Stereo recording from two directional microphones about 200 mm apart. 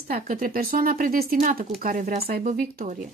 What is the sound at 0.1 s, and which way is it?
Speech, 45° right (ahead or behind).